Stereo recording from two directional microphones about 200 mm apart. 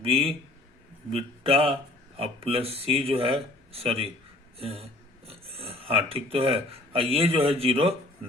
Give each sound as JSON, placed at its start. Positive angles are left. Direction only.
{"t": 0.1, "sound": "speech", "side_deg": -30}